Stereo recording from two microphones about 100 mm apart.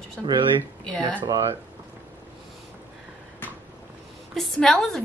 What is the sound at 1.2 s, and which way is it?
Speech, 40° right (ahead or behind).